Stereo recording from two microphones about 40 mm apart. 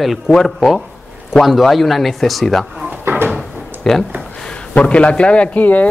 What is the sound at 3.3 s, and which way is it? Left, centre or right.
Drawer open or close, centre.